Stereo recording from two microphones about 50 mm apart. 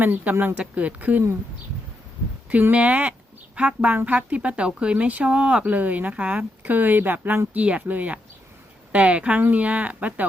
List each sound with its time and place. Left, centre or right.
0.0 s speech: right
2.5 s speech: right
7.5 s speech: right